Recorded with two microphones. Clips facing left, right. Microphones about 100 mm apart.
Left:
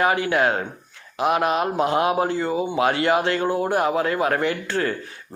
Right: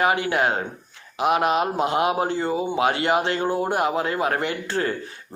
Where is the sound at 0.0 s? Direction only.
25° right (ahead or behind).